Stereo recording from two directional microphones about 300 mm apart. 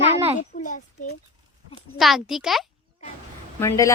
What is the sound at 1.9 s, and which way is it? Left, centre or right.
Speech, centre.